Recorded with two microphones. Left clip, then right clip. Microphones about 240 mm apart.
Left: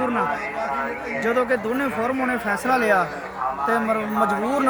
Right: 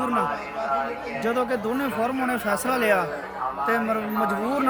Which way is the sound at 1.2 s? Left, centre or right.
Right.